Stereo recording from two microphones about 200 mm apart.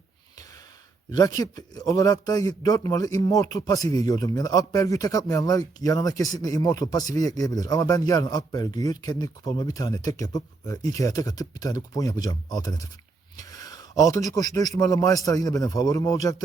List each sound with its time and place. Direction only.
1.1 s speech: 20° left (ahead or behind)